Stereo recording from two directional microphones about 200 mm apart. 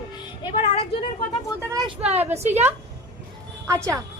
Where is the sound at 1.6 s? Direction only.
15° right (ahead or behind).